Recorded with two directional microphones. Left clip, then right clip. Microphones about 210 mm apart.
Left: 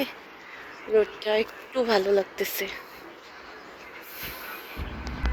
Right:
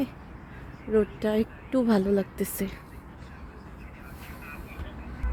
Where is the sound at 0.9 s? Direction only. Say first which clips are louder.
Left 2 dB; 20° right (ahead or behind).